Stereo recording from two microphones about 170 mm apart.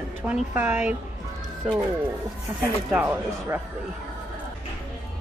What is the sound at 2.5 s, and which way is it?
Speech, 25° right (ahead or behind).